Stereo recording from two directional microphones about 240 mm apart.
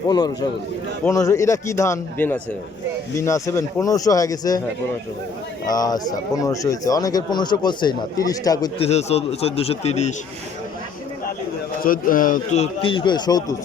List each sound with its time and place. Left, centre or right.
1.0 s speech: centre
5.7 s speech: centre
8.9 s a man's voice: left
11.8 s a man's voice: left; by 13.4 s centre